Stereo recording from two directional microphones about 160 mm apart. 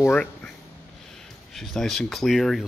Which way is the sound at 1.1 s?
Centre (ahead or behind).